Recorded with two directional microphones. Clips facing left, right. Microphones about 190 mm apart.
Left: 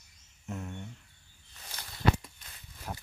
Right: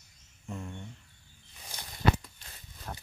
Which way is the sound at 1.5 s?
15° right (ahead or behind).